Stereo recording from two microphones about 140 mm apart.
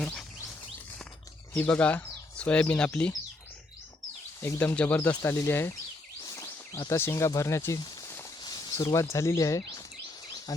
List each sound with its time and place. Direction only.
0.0 s a sound: 5° left (ahead or behind)
1.5 s speech: 10° left (ahead or behind)
4.4 s speech: 20° left (ahead or behind)
6.2 s a sound: 20° left (ahead or behind)
6.9 s speech: 20° left (ahead or behind)
8.4 s speech: 30° left (ahead or behind)